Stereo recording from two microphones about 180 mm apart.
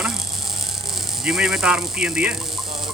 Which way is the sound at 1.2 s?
Centre (ahead or behind).